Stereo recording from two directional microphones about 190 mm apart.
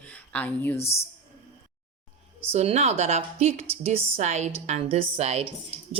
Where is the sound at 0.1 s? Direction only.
10° left (ahead or behind).